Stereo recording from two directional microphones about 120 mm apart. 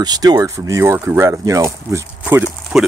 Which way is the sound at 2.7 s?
5° right (ahead or behind).